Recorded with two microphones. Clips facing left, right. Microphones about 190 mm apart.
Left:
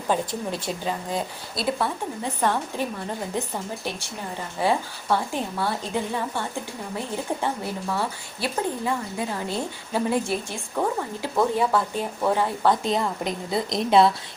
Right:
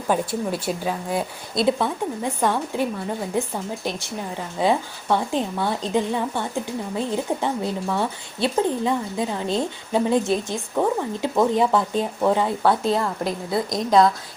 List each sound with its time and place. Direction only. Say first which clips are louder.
0.1 s speech: right 3 dB; 10° right (ahead or behind)
4.6 s speech: right 3 dB; 15° right (ahead or behind)
13.0 s a woman's voice: right 2 dB; centre (ahead or behind)